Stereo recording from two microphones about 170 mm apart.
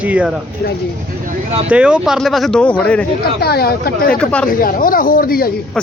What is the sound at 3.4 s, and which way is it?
Speech, 65° left (ahead or behind).